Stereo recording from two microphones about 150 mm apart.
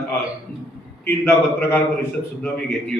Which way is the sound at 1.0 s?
15° left (ahead or behind).